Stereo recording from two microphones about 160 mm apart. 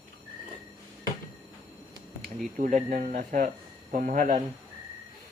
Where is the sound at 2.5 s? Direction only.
55° right (ahead or behind).